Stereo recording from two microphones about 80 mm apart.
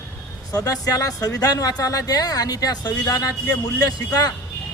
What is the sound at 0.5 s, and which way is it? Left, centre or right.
Speech, left.